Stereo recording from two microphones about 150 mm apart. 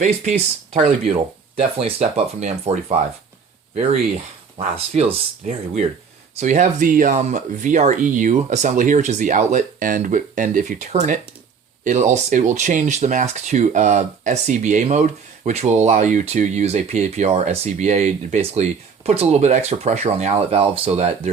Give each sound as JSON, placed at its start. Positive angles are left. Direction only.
{"t": 0.0, "sound": "speech", "side_deg": -50}
{"t": 4.5, "sound": "speech", "side_deg": -40}